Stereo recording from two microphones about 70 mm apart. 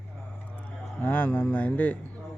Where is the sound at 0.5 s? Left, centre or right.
Left.